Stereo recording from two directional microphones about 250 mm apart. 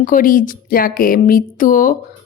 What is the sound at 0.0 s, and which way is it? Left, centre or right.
A woman's voice, left.